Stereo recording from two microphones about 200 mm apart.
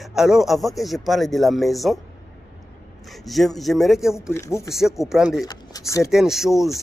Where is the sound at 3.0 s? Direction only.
Centre (ahead or behind).